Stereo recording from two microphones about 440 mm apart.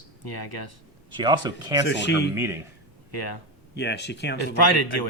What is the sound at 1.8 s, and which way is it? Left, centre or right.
Speech, left.